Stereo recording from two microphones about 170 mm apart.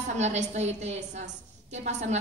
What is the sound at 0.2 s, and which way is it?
A woman's voice, 40° right (ahead or behind).